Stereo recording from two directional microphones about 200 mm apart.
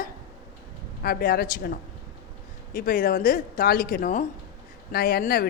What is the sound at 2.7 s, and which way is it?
A man's voice, 45° left (ahead or behind).